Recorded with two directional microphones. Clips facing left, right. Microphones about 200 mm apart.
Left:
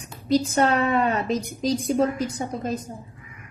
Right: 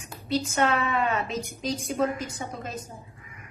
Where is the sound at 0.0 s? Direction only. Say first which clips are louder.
Left 6 dB; 35° left (ahead or behind).